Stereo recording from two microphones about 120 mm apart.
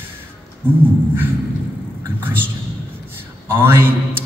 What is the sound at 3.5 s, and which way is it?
Speech, 20° right (ahead or behind).